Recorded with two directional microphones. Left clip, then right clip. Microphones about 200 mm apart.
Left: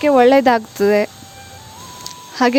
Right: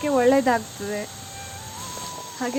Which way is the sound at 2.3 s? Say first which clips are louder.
Left 14 dB; 45° left (ahead or behind).